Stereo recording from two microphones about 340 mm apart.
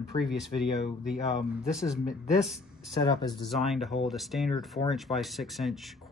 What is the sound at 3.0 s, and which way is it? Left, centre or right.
Speech, centre.